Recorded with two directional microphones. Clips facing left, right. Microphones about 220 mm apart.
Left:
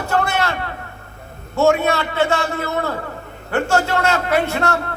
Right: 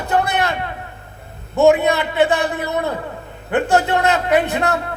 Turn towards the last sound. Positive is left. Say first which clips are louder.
# right 2 dB
turn(degrees=-15)  # may be behind; listen again after turning